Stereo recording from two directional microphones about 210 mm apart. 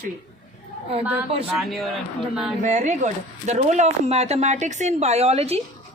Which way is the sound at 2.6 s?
35° right (ahead or behind).